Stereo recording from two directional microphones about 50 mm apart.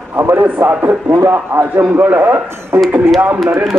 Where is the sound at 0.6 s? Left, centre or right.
Right.